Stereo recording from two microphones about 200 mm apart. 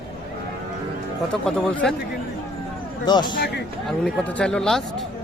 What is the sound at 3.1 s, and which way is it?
Speech, 20° left (ahead or behind).